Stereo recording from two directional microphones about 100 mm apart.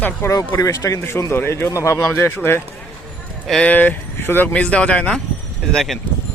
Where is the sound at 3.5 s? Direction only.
10° left (ahead or behind).